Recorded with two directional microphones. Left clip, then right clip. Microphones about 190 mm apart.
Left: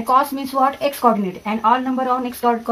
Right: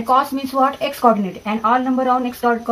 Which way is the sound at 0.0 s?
30° left (ahead or behind).